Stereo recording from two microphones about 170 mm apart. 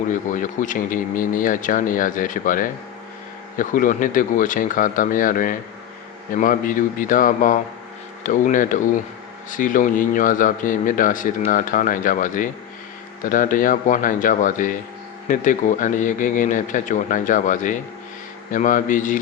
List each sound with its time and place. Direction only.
0.1 s speech: 50° left (ahead or behind)